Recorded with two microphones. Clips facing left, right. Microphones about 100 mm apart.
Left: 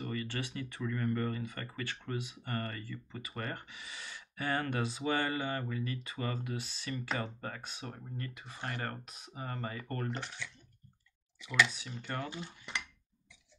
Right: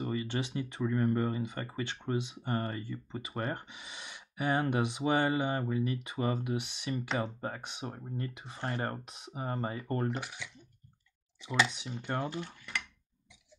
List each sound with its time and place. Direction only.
0.0 s speech: 20° right (ahead or behind)
10.0 s speech: 10° right (ahead or behind)
11.4 s speech: 25° right (ahead or behind)
12.7 s speech: 20° left (ahead or behind)